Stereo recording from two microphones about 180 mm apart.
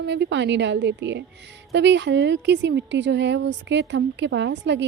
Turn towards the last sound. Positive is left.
turn(degrees=-75)  # may be behind; listen again after turning